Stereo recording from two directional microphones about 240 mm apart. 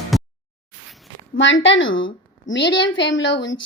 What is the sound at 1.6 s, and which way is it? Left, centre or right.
A woman's voice, left.